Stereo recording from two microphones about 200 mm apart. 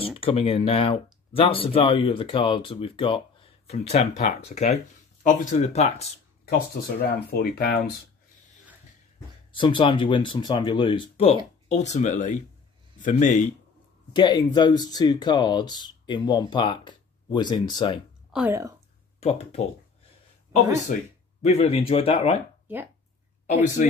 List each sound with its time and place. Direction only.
0.0 s speech: 30° left (ahead or behind)
7.2 s speech: 50° left (ahead or behind)
9.5 s speech: 25° left (ahead or behind)
14.1 s speech: 20° left (ahead or behind)
18.3 s speech: 10° right (ahead or behind)
19.1 s speech: 30° left (ahead or behind)
21.4 s speech: 30° left (ahead or behind)
23.4 s speech: 40° left (ahead or behind)